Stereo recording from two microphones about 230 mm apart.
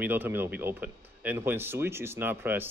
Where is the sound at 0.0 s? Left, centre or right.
Centre.